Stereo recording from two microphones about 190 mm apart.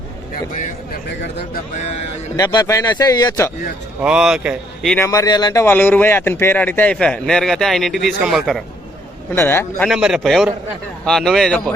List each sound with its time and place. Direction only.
1.0 s speech: 60° left (ahead or behind)
1.7 s speech: 35° left (ahead or behind)
2.3 s a man's voice: 20° left (ahead or behind)
4.0 s speech: 5° right (ahead or behind)
4.9 s a man's voice: 15° left (ahead or behind); by 8.6 s centre (ahead or behind)
9.3 s a man's voice: 15° left (ahead or behind)
9.9 s speech: 5° right (ahead or behind)